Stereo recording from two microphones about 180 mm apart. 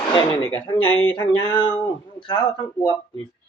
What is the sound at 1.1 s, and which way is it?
Speech, 25° left (ahead or behind).